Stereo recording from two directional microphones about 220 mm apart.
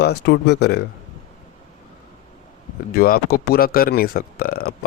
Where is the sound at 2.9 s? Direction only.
45° left (ahead or behind).